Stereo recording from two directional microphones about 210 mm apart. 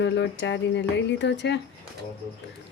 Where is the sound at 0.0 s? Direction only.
60° left (ahead or behind).